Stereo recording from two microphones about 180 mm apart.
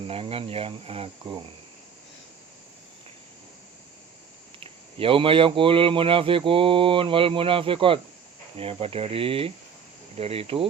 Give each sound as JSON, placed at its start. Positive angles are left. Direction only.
{"t": 0.1, "sound": "speech", "side_deg": -30}
{"t": 4.6, "sound": "speech", "side_deg": -30}